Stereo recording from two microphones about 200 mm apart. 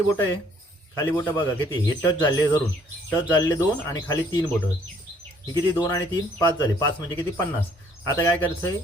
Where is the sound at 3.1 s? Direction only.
15° left (ahead or behind).